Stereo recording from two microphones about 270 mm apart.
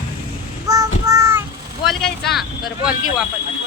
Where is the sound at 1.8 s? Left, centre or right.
Centre.